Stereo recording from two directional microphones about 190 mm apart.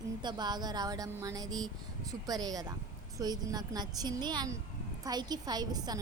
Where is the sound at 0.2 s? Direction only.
25° right (ahead or behind).